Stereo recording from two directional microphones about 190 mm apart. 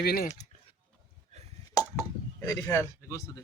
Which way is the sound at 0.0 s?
55° left (ahead or behind).